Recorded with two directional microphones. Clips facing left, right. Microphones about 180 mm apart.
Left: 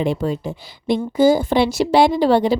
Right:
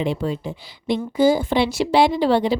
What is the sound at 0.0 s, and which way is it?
A woman's voice, 45° left (ahead or behind).